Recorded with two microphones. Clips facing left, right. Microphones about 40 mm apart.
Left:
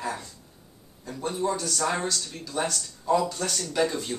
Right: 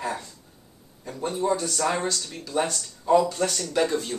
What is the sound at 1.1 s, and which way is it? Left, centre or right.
Speech, centre.